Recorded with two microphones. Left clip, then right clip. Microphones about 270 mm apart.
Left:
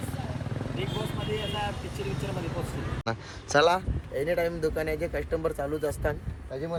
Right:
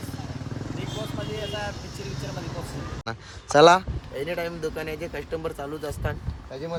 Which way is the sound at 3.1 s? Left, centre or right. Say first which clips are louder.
Right 3 dB; centre.